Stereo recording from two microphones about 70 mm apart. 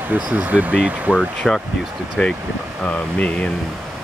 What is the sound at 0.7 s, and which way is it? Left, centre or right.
Speech, centre.